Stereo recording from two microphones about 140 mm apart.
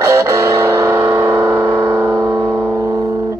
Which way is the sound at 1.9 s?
10° right (ahead or behind).